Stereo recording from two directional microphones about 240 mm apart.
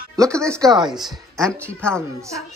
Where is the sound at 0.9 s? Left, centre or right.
Centre.